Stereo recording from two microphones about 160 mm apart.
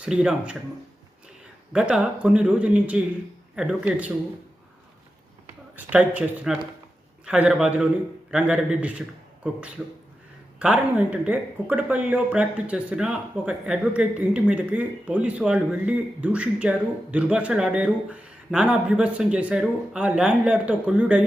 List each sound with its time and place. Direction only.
0.0 s a man's voice: 5° right (ahead or behind)
1.7 s speech: 5° right (ahead or behind)
5.7 s a man's voice: 10° right (ahead or behind)